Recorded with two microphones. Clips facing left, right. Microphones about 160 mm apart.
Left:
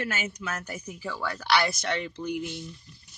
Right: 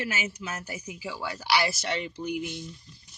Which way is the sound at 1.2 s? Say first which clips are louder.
Left 3 dB; 55° left (ahead or behind).